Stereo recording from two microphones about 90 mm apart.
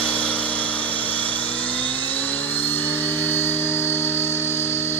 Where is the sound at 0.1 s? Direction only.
15° left (ahead or behind).